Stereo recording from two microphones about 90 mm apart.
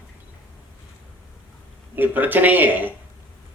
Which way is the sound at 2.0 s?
20° right (ahead or behind).